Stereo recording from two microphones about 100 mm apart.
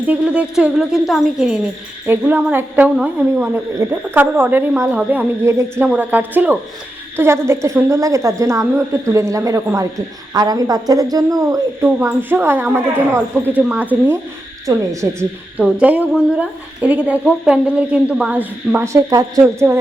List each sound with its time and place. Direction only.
0.0 s a woman's voice: 15° right (ahead or behind)
2.0 s a woman's voice: 20° right (ahead or behind)
5.8 s a woman's voice: 15° right (ahead or behind); by 11.6 s 35° right (ahead or behind)
11.8 s a woman's voice: 20° right (ahead or behind)
13.6 s a woman's voice: 15° right (ahead or behind)
14.7 s a woman's voice: 40° right (ahead or behind)
15.8 s a woman's voice: 15° right (ahead or behind)
18.9 s a woman's voice: 35° right (ahead or behind)